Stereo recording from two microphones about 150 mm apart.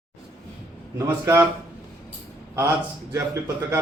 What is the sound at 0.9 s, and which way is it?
Speech, 20° right (ahead or behind).